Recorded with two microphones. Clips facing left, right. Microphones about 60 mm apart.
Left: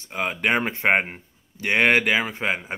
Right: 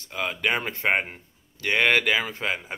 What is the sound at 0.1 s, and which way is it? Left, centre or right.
Speech, left.